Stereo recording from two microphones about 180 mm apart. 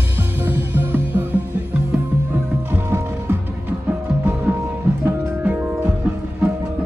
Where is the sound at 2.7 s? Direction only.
10° right (ahead or behind).